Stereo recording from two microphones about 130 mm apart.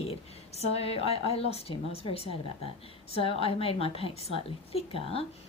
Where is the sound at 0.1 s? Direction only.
55° left (ahead or behind).